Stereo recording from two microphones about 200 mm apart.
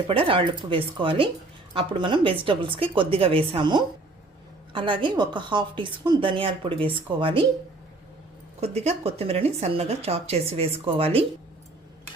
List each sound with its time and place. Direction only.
0.1 s a woman's voice: 25° right (ahead or behind)
8.6 s speech: 30° right (ahead or behind)